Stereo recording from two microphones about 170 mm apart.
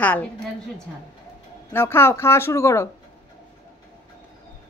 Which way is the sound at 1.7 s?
15° left (ahead or behind).